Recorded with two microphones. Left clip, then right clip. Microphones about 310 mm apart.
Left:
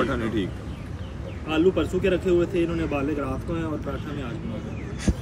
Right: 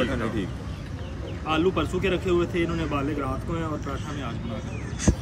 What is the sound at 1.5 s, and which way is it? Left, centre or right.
Speech, centre.